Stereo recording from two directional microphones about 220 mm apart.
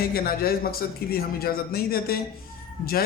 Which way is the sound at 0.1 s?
40° left (ahead or behind).